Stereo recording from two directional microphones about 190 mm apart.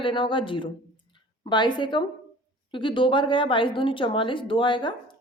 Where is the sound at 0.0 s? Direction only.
25° left (ahead or behind).